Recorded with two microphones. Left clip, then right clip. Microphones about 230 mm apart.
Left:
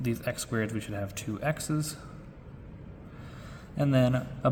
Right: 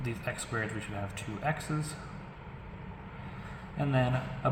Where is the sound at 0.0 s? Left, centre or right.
Left.